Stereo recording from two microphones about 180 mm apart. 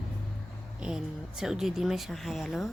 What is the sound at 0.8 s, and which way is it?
Speech, 5° right (ahead or behind).